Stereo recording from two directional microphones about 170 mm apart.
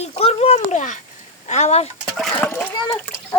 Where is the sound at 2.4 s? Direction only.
10° left (ahead or behind).